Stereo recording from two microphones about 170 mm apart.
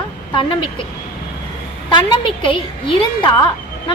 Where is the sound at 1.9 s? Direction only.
30° left (ahead or behind).